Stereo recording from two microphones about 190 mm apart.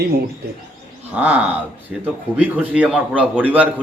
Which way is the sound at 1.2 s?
5° right (ahead or behind).